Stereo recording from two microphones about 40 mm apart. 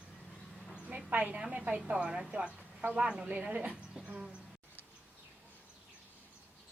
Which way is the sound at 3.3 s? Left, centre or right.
Right.